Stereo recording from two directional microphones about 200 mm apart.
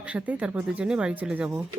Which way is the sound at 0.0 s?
5° right (ahead or behind).